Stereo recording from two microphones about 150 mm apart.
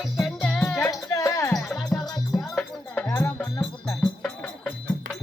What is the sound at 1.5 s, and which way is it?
Music, centre (ahead or behind).